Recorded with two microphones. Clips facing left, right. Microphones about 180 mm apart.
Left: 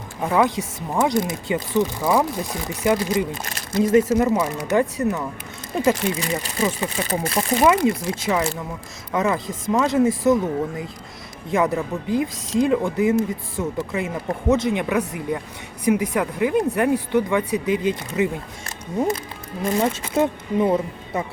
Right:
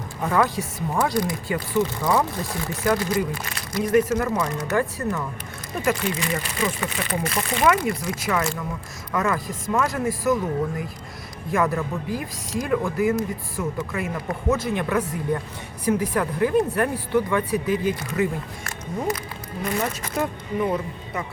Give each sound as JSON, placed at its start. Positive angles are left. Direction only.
{"t": 0.2, "sound": "speech", "side_deg": 15}
{"t": 7.6, "sound": "speech", "side_deg": 20}
{"t": 11.5, "sound": "speech", "side_deg": 20}
{"t": 19.6, "sound": "speech", "side_deg": 25}